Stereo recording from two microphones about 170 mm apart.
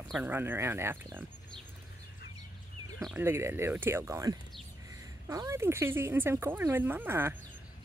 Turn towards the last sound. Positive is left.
turn(degrees=-10)  # may be behind; listen again after turning